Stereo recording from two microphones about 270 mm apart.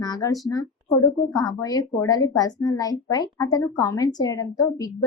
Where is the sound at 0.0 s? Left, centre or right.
Centre.